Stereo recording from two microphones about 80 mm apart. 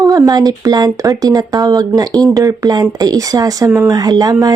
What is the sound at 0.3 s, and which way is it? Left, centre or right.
Speech, right.